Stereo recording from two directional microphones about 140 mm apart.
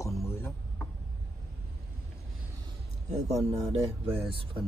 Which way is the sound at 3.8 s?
15° right (ahead or behind).